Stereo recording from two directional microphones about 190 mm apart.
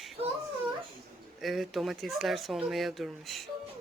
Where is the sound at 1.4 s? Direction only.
Centre (ahead or behind).